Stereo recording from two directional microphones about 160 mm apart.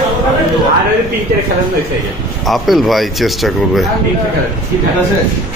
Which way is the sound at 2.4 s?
Centre (ahead or behind).